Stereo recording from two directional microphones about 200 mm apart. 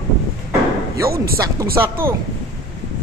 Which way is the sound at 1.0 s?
50° right (ahead or behind).